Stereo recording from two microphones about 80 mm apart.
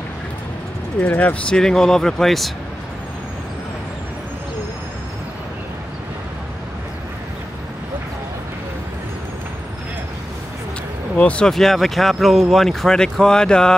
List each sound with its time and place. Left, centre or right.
1.0 s speech: centre
1.6 s speech: centre
11.1 s speech: centre
11.5 s speech: centre